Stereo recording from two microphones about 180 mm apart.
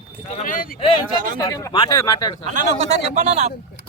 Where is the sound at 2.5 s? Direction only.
40° right (ahead or behind).